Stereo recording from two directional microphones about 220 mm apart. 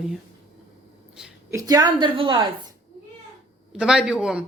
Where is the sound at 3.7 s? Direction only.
5° right (ahead or behind).